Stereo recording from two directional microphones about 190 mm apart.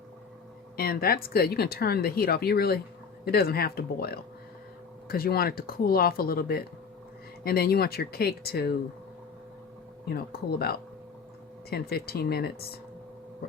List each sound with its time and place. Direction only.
0.8 s speech: 50° left (ahead or behind)
10.1 s speech: 55° left (ahead or behind)